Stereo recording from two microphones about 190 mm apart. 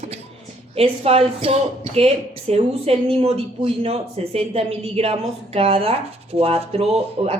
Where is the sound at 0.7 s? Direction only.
30° right (ahead or behind).